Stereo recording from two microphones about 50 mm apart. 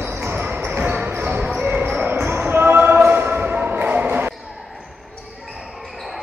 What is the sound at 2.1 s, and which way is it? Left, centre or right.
Basketball bounce, right.